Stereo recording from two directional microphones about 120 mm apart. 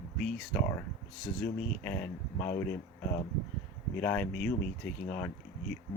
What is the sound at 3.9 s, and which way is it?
Speech, 10° left (ahead or behind).